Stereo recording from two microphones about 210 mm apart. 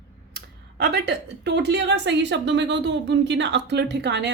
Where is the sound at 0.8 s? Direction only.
50° right (ahead or behind).